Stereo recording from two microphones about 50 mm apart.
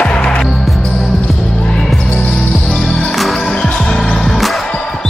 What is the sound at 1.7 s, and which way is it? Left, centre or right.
Basketball bounce, centre.